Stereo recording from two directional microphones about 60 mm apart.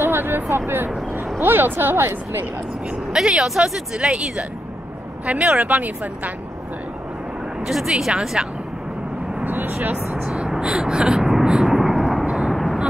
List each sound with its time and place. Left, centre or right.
0.0 s a sound: right
1.4 s a woman's voice: right
3.1 s speech: centre
5.2 s speech: right
7.6 s speech: centre
9.4 s speech: right
10.2 s vehicle: centre
12.3 s vehicle: centre